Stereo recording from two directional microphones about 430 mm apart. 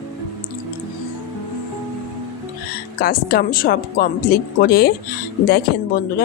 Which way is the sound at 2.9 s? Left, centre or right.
Left.